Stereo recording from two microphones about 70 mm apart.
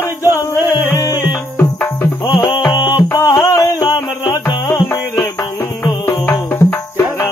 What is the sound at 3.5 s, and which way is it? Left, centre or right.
Music, left.